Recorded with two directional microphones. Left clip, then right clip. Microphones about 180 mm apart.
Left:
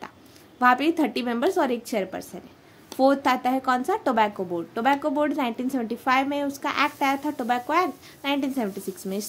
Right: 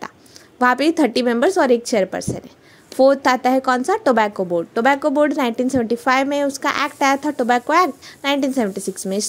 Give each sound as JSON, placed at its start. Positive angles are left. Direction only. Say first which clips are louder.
{"t": 0.6, "sound": "speech", "louder": "right 4 dB", "side_deg": -40}